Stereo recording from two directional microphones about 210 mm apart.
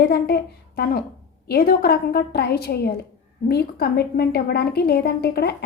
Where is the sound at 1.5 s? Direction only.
50° left (ahead or behind).